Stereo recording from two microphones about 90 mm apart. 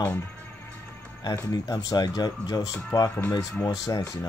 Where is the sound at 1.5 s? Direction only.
45° left (ahead or behind).